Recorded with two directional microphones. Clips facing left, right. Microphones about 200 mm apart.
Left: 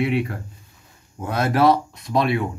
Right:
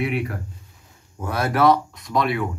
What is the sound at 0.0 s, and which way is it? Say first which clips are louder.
A man's voice: left 3 dB; 25° left (ahead or behind).